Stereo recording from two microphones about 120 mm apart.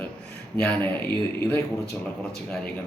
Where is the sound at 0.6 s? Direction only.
10° left (ahead or behind).